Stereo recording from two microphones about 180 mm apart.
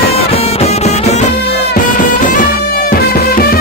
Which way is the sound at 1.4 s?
60° left (ahead or behind).